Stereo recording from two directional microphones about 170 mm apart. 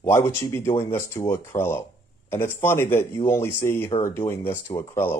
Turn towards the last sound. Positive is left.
turn(degrees=15)  # may be behind; listen again after turning